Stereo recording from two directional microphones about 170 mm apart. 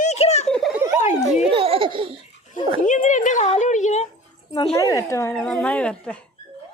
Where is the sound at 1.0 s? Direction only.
40° left (ahead or behind).